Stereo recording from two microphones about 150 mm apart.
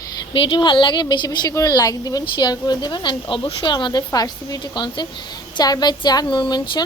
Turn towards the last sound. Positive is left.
turn(degrees=30)  # may be behind; listen again after turning